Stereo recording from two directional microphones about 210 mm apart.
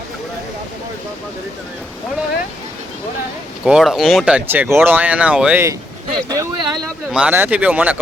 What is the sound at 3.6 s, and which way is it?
Speech, centre (ahead or behind).